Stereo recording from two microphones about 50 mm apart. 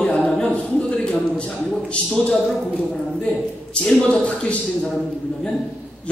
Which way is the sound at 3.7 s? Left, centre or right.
Left.